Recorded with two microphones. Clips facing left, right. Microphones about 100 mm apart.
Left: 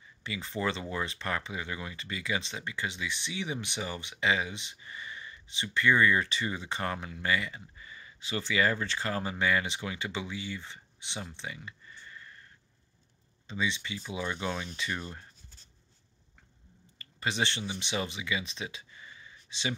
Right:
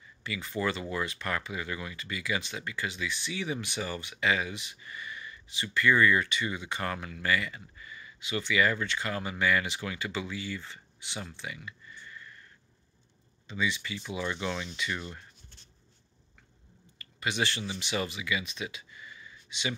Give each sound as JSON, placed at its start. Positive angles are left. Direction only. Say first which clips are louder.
{"t": 0.2, "sound": "speech", "louder": "right 1 dB", "side_deg": 25}
{"t": 13.5, "sound": "speech", "louder": "right 1 dB", "side_deg": 25}
{"t": 14.8, "sound": "speech", "louder": "right 1 dB", "side_deg": 35}
{"t": 17.0, "sound": "speech", "louder": "even", "side_deg": 30}